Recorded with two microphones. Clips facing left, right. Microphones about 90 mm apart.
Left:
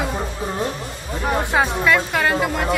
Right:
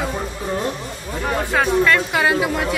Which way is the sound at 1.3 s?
15° left (ahead or behind).